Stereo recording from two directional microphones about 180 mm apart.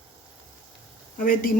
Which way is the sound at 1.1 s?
50° left (ahead or behind).